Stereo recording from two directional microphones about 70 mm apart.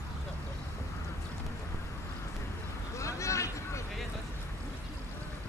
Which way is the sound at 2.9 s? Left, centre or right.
Left.